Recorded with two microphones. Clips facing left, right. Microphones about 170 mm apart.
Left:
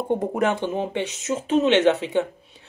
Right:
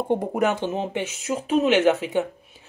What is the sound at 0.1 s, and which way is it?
Speech, 15° right (ahead or behind).